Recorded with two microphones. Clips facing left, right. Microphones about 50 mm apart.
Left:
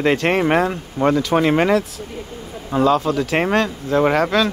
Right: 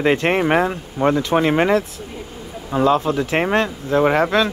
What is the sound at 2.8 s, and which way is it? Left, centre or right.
Speech, right.